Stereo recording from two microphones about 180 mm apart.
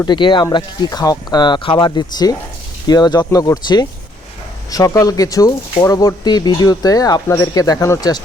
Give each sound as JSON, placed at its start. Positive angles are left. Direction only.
{"t": 0.0, "sound": "speech", "side_deg": 25}